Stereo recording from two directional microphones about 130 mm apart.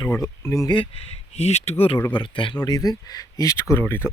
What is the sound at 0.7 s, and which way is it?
Speech, 45° left (ahead or behind).